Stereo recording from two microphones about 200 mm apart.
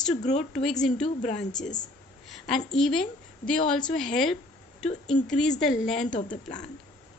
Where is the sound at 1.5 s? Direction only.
35° left (ahead or behind).